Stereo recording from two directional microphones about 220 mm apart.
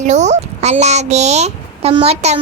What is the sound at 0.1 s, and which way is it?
A child's voice, 30° right (ahead or behind).